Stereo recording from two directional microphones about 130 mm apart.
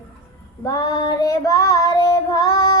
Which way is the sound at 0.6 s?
25° left (ahead or behind).